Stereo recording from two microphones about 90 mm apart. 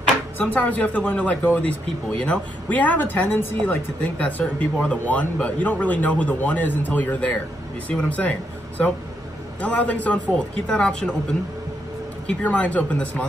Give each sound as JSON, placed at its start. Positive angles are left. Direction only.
{"t": 0.4, "sound": "speech", "side_deg": 20}
{"t": 12.3, "sound": "speech", "side_deg": 15}